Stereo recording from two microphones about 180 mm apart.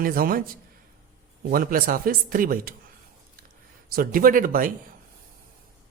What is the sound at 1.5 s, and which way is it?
Speech, 50° right (ahead or behind).